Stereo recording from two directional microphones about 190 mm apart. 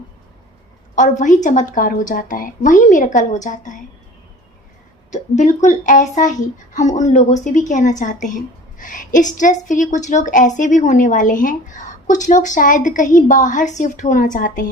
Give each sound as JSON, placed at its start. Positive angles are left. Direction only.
{"t": 0.9, "sound": "a woman's voice", "side_deg": 40}
{"t": 5.1, "sound": "a woman's voice", "side_deg": 40}